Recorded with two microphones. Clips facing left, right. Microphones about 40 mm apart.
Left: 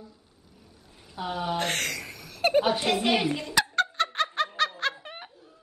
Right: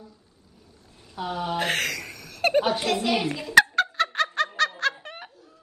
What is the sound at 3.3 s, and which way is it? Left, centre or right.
Speech, centre.